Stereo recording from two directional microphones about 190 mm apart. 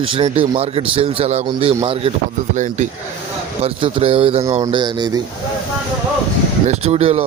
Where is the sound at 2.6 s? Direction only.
40° right (ahead or behind).